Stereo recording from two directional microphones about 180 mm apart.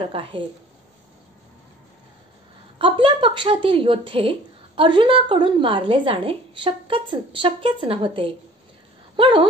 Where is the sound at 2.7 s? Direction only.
30° right (ahead or behind).